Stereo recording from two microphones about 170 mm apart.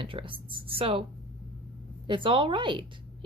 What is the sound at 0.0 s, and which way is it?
A woman's voice, 30° right (ahead or behind).